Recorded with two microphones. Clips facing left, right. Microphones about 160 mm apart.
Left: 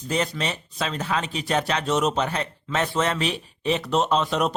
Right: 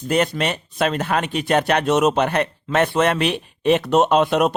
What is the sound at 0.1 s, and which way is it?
Speech, 60° right (ahead or behind).